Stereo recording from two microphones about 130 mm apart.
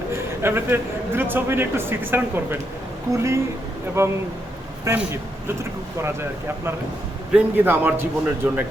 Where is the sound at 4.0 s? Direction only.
20° right (ahead or behind).